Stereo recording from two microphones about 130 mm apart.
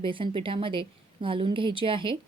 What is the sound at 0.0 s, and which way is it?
A woman's voice, 40° right (ahead or behind).